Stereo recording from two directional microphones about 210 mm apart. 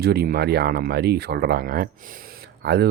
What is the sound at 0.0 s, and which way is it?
Speech, 50° right (ahead or behind).